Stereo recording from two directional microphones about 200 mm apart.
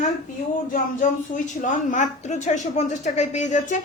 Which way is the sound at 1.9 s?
35° left (ahead or behind).